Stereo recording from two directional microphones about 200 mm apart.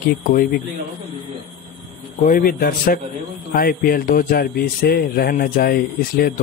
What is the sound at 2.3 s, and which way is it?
Speech, 45° left (ahead or behind).